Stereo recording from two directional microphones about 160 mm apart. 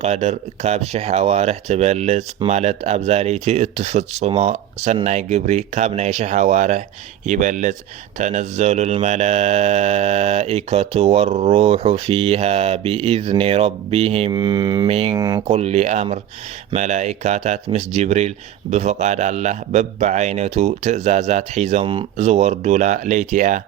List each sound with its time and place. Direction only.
0.0 s speech: 40° right (ahead or behind)
14.3 s mantra: 25° right (ahead or behind)
14.8 s speech: 40° right (ahead or behind)
15.1 s mantra: 25° right (ahead or behind)
15.4 s speech: 40° right (ahead or behind)